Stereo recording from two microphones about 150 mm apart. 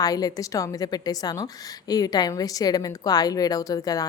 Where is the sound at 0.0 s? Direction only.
25° left (ahead or behind).